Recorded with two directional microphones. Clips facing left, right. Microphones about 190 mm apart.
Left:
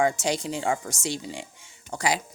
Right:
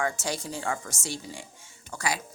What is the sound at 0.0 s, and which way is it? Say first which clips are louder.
Speech: left 6 dB; 15° left (ahead or behind).